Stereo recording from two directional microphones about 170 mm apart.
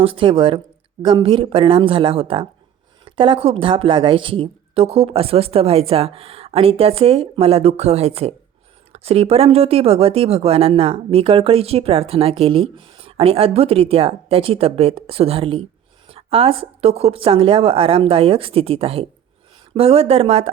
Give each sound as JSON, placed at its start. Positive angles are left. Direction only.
{"t": 0.0, "sound": "speech", "side_deg": -30}